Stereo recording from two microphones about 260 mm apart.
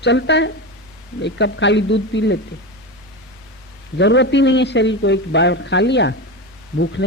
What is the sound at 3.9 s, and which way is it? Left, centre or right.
A man's voice, left.